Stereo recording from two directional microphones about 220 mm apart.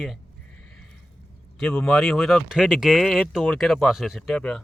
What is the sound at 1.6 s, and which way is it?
Speech, 5° left (ahead or behind).